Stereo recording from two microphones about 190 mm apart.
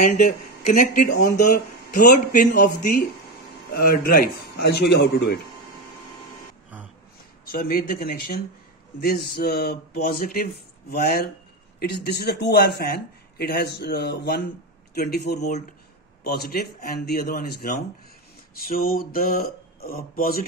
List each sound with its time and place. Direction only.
0.0 s speech: 40° left (ahead or behind); by 5.4 s 60° left (ahead or behind)
7.4 s speech: 50° left (ahead or behind)